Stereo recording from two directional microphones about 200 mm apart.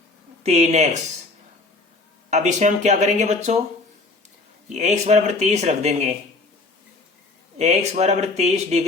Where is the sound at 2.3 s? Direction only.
35° right (ahead or behind).